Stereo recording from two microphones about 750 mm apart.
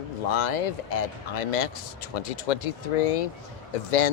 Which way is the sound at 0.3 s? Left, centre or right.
Left.